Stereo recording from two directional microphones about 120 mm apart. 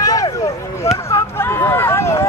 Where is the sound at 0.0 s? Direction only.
30° left (ahead or behind).